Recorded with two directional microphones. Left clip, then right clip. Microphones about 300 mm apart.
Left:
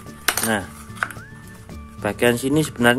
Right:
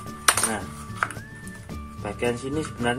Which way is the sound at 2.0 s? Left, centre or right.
Left.